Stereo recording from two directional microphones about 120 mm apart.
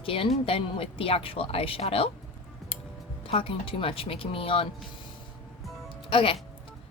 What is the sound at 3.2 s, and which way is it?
Speech, 50° left (ahead or behind).